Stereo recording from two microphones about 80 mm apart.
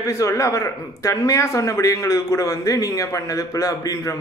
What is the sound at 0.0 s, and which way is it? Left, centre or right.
A man's voice, left.